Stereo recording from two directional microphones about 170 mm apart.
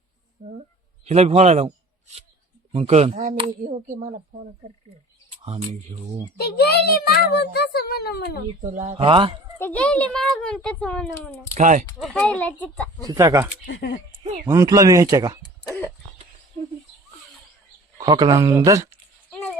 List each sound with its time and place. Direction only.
0.4 s speech: 40° right (ahead or behind)
2.7 s speech: 35° right (ahead or behind)
5.5 s speech: 30° right (ahead or behind)
6.4 s a child's voice: 70° left (ahead or behind)
8.6 s speech: 45° right (ahead or behind)
9.6 s speech: 10° left (ahead or behind)
11.5 s speech: 45° right (ahead or behind)
11.9 s speech: centre (ahead or behind)
13.0 s speech: 20° right (ahead or behind)
13.7 s a child's voice: 70° left (ahead or behind)
14.4 s speech: 20° right (ahead or behind)
15.4 s a sound: 20° left (ahead or behind)
17.9 s speech: 25° right (ahead or behind)